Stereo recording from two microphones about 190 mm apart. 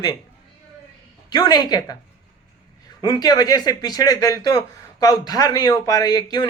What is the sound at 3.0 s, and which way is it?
Speech, 20° left (ahead or behind).